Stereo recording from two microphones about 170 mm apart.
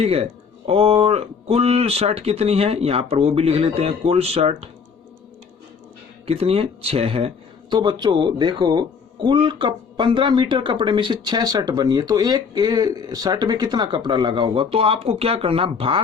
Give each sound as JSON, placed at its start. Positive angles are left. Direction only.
{"t": 0.0, "sound": "speech", "side_deg": -35}
{"t": 6.2, "sound": "speech", "side_deg": -35}